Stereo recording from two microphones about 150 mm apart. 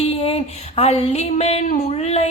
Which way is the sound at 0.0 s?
40° left (ahead or behind).